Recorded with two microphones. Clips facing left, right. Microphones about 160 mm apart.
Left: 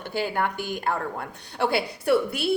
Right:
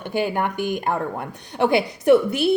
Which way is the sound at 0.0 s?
15° right (ahead or behind).